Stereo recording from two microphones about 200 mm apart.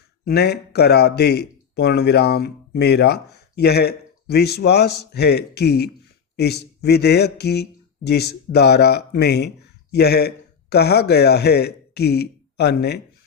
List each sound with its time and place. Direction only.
0.3 s speech: 55° left (ahead or behind)